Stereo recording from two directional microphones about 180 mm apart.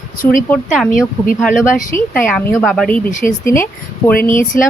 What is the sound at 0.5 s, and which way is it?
Speech, centre (ahead or behind).